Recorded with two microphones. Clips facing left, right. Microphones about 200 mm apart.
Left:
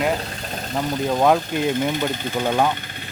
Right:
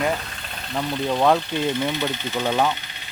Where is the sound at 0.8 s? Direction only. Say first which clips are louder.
Left 2 dB; 45° left (ahead or behind).